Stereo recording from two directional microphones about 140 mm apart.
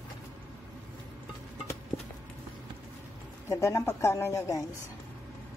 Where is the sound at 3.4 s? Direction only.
20° left (ahead or behind).